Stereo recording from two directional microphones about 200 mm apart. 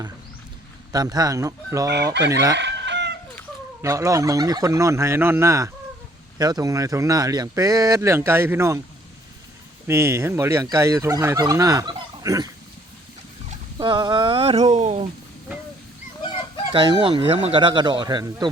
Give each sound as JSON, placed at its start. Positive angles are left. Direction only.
{"t": 0.9, "sound": "fowl", "side_deg": -20}
{"t": 2.1, "sound": "chicken", "side_deg": -60}
{"t": 3.8, "sound": "fowl", "side_deg": -15}
{"t": 9.8, "sound": "fowl", "side_deg": -15}
{"t": 13.7, "sound": "a sound", "side_deg": -20}
{"t": 16.7, "sound": "speech", "side_deg": -25}